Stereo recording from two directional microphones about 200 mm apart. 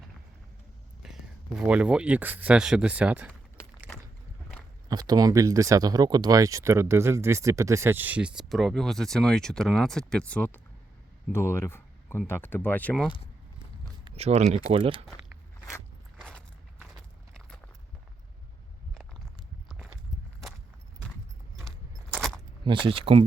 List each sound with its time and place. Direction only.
1.0 s speech: 5° right (ahead or behind)
3.9 s a sound: 10° left (ahead or behind)
4.9 s speech: 20° right (ahead or behind); by 13.1 s 5° left (ahead or behind)
14.0 s speech: 30° right (ahead or behind)
19.6 s walk: centre (ahead or behind)
22.1 s keys jangling: centre (ahead or behind)
22.6 s speech: 25° right (ahead or behind)